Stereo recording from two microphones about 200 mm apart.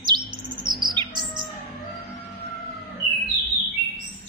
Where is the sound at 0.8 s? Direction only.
20° right (ahead or behind).